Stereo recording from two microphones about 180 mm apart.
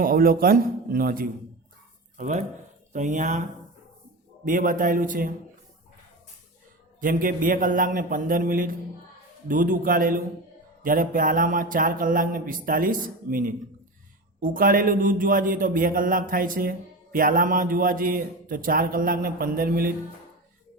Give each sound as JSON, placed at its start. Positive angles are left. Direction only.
{"t": 0.0, "sound": "a man's voice", "side_deg": -55}
{"t": 4.4, "sound": "a man's voice", "side_deg": -50}
{"t": 7.0, "sound": "a man's voice", "side_deg": -50}